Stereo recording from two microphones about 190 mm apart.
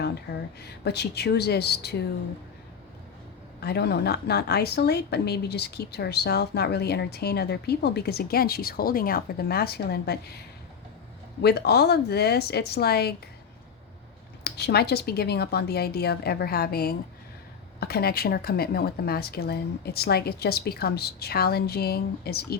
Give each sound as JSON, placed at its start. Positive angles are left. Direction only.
{"t": 0.6, "sound": "a woman's voice", "side_deg": 60}
{"t": 3.6, "sound": "a woman's voice", "side_deg": 55}
{"t": 11.4, "sound": "a woman's voice", "side_deg": 60}
{"t": 14.4, "sound": "a woman's voice", "side_deg": 55}